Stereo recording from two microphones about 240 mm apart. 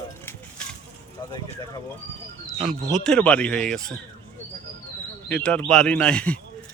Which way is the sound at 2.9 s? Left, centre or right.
Centre.